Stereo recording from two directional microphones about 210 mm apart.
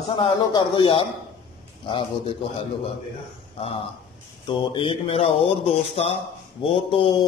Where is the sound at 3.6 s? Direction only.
25° left (ahead or behind).